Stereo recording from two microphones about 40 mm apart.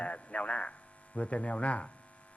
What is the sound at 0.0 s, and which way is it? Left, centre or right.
A man's voice, left.